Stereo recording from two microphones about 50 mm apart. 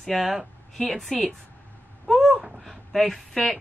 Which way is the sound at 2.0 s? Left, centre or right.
Centre.